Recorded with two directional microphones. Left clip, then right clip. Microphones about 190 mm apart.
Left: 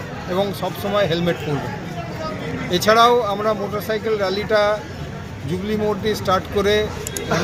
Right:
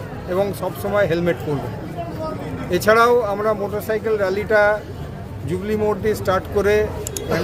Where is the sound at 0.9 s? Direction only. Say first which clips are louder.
Right 1 dB; 10° right (ahead or behind).